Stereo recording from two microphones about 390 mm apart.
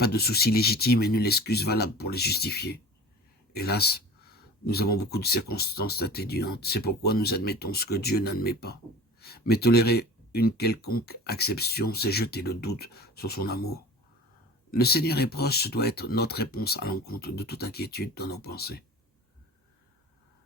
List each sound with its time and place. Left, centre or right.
0.0 s speech: left
14.7 s speech: left